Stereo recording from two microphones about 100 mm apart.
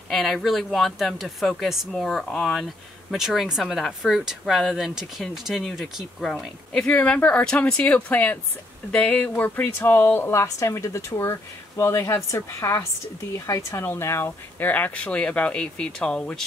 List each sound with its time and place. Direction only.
0.1 s speech: centre (ahead or behind)